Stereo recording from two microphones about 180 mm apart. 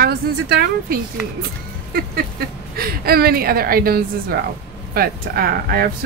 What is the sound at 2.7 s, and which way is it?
Speech, 60° right (ahead or behind).